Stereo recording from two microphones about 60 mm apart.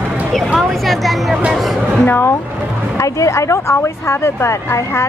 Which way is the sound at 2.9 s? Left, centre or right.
Left.